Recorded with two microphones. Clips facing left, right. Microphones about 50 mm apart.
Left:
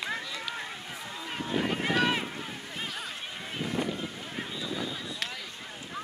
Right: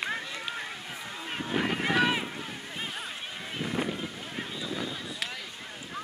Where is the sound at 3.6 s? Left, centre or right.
Centre.